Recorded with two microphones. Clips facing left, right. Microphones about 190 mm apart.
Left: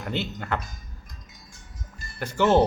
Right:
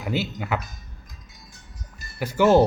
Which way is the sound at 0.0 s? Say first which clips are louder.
Right 3 dB; 5° right (ahead or behind).